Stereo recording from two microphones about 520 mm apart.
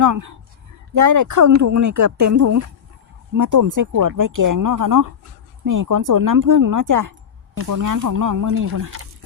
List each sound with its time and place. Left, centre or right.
0.0 s speech: right